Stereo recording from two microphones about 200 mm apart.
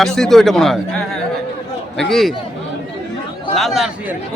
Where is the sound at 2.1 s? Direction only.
Centre (ahead or behind).